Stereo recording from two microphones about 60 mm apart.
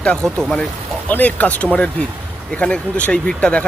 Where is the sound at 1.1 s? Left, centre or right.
Left.